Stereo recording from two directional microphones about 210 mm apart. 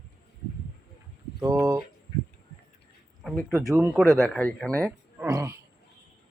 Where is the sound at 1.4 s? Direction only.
15° right (ahead or behind).